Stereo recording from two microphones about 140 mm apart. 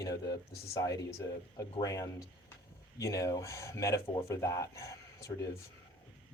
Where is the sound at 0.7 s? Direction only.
25° left (ahead or behind).